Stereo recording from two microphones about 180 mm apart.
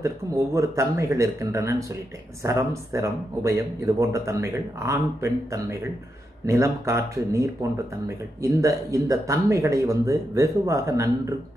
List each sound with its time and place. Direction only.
0.6 s speech: 15° right (ahead or behind)